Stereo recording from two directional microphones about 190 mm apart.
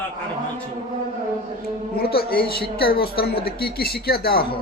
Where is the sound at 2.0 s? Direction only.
55° left (ahead or behind).